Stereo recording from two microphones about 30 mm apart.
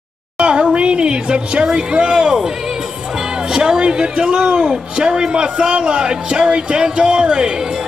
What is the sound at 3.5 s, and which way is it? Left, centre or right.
A woman's voice, right.